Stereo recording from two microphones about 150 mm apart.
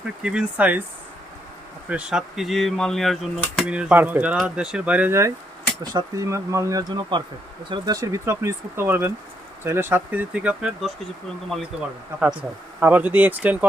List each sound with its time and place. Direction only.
0.2 s speech: 5° right (ahead or behind)
1.9 s speech: 5° right (ahead or behind)